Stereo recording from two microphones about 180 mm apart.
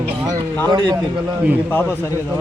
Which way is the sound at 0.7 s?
25° right (ahead or behind).